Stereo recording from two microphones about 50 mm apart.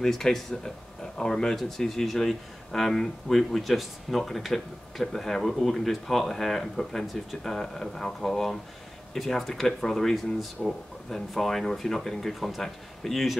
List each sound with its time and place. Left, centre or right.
0.0 s speech: centre